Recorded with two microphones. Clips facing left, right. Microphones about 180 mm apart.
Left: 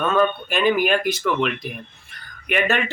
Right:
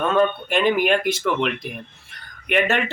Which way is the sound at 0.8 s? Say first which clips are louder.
Right 1 dB; 25° right (ahead or behind).